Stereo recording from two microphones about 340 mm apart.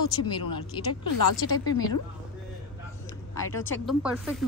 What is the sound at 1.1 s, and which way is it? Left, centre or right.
Speech, left.